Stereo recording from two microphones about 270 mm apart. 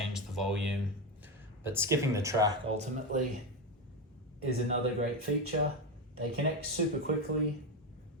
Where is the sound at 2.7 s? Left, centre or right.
Right.